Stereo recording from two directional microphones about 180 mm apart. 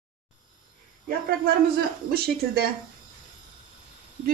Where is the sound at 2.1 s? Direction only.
60° right (ahead or behind).